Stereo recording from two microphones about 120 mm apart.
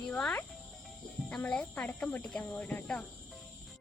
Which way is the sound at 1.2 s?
10° left (ahead or behind).